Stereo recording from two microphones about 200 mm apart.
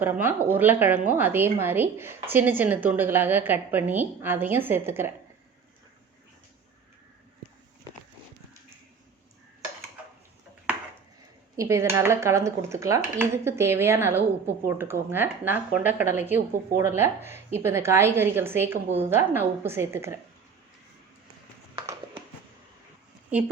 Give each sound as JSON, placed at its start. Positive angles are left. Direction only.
{"t": 0.0, "sound": "a woman's voice", "side_deg": -10}
{"t": 11.5, "sound": "a woman's voice", "side_deg": -15}
{"t": 21.8, "sound": "a sound", "side_deg": -25}